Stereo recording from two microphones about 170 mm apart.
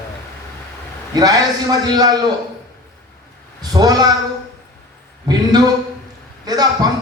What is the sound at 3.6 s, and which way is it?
Speech, 25° right (ahead or behind).